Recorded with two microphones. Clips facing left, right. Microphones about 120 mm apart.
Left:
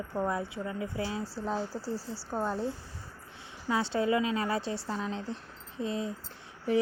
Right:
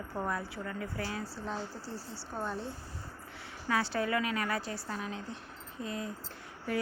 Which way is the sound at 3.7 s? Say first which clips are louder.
Left 3 dB; 25° left (ahead or behind).